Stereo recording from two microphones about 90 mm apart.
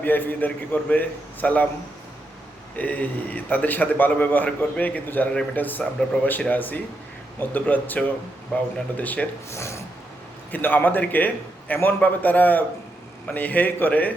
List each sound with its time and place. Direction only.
0.0 s a man's voice: 20° left (ahead or behind)
2.7 s a man's voice: 15° left (ahead or behind)
9.5 s speech: 30° left (ahead or behind)
10.5 s a man's voice: 20° left (ahead or behind)